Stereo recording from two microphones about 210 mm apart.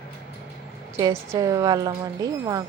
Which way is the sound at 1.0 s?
15° right (ahead or behind).